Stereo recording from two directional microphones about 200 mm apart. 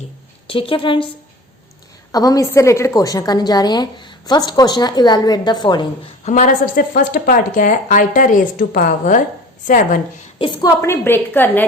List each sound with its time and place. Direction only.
0.4 s a woman's voice: 25° left (ahead or behind)
2.1 s a woman's voice: 15° left (ahead or behind)
6.2 s a woman's voice: 40° left (ahead or behind)
10.3 s a woman's voice: 20° left (ahead or behind)